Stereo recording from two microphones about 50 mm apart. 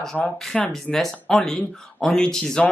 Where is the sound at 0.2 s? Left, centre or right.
Centre.